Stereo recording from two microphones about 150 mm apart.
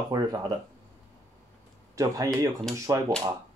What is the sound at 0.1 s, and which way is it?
Speech, 25° right (ahead or behind).